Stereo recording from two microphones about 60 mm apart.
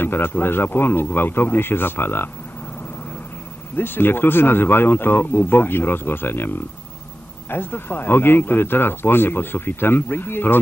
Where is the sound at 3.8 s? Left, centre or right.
Left.